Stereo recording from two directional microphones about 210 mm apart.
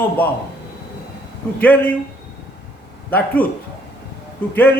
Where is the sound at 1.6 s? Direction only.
5° left (ahead or behind).